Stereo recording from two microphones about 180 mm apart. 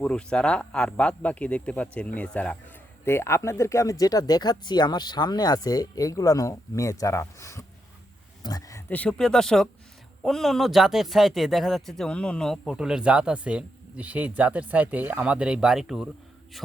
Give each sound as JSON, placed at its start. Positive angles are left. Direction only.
{"t": 0.0, "sound": "speech", "side_deg": 5}
{"t": 8.4, "sound": "a sound", "side_deg": 20}
{"t": 8.9, "sound": "speech", "side_deg": 5}